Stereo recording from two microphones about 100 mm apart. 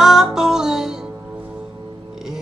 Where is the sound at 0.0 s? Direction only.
5° right (ahead or behind).